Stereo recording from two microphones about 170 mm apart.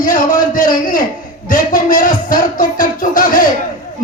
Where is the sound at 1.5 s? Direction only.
50° left (ahead or behind).